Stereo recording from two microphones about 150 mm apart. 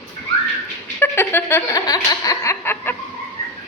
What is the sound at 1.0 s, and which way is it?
Laughter, 15° left (ahead or behind).